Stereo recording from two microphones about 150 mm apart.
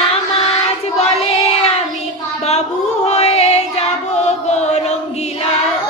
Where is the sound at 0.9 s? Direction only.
45° left (ahead or behind).